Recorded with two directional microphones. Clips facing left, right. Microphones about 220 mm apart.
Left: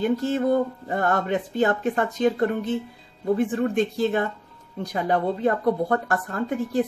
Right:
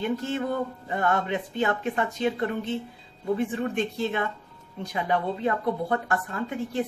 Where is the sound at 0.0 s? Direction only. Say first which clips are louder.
Left 5 dB; 40° left (ahead or behind).